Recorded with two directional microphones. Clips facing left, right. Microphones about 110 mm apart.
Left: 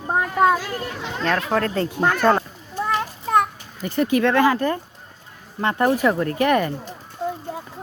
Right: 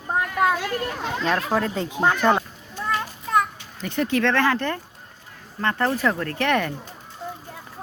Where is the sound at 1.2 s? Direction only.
10° right (ahead or behind).